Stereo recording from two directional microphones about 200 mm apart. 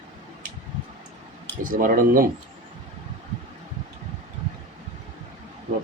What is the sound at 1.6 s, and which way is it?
Speech, 45° right (ahead or behind).